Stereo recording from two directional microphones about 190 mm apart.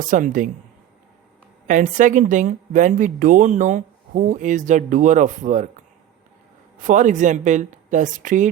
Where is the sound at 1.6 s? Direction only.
45° right (ahead or behind).